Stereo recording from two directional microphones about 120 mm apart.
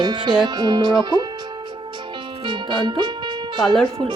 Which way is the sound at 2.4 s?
40° right (ahead or behind).